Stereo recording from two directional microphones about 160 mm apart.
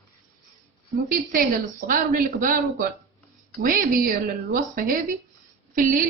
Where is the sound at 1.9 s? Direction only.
60° right (ahead or behind).